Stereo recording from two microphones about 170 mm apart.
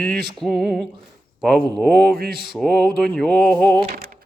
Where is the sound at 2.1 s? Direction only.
65° right (ahead or behind).